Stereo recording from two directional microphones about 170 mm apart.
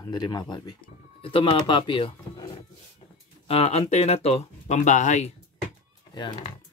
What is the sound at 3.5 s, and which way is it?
Speech, 40° left (ahead or behind).